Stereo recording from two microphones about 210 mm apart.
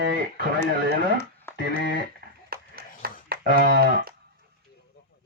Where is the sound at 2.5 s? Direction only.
45° right (ahead or behind).